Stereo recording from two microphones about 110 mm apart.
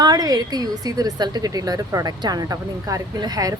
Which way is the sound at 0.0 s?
35° right (ahead or behind).